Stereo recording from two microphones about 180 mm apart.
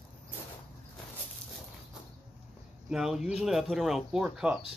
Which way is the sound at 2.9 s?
5° right (ahead or behind).